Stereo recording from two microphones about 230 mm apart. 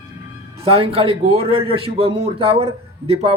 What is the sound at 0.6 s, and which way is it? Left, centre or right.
Speech, right.